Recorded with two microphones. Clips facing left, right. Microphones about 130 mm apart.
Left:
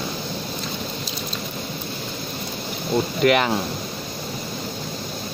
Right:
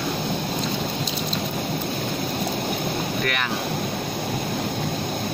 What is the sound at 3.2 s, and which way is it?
Speech, 25° left (ahead or behind).